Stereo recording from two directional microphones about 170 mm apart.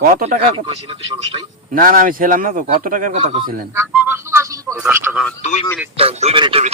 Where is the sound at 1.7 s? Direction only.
55° right (ahead or behind).